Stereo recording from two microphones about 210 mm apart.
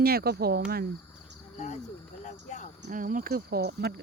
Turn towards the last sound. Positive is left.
turn(degrees=-50)  # may be behind; listen again after turning